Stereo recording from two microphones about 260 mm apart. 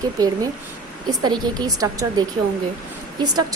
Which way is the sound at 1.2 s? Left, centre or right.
Centre.